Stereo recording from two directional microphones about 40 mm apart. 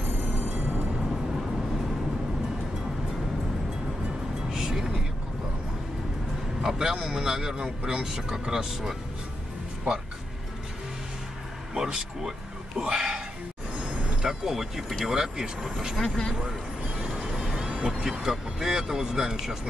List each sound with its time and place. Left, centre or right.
0.6 s music: right
4.5 s music: centre
6.6 s a man's voice: centre
11.7 s speech: centre
13.7 s a sound: right
14.2 s a man's voice: centre
16.0 s speech: centre
17.4 s vehicle: centre
17.6 s vehicle: right
18.2 s a man's voice: centre